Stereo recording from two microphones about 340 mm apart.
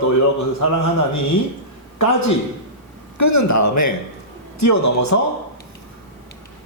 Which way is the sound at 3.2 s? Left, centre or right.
Left.